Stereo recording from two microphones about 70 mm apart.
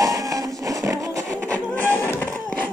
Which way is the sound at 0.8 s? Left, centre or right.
Right.